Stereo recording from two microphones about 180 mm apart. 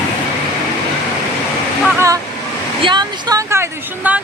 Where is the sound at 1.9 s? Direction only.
20° right (ahead or behind).